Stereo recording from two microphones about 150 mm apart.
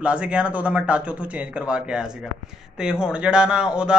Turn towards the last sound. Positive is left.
turn(degrees=-5)  # may be behind; listen again after turning